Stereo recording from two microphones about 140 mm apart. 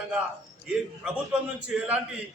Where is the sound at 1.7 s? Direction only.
10° right (ahead or behind).